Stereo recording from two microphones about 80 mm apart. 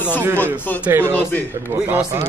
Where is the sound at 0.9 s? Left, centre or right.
Right.